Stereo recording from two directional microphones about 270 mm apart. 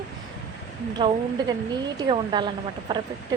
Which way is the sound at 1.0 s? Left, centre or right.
Centre.